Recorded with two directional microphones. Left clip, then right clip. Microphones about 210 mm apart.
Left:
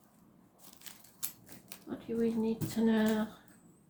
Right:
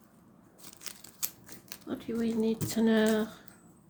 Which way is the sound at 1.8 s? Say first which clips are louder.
Even; 55° right (ahead or behind).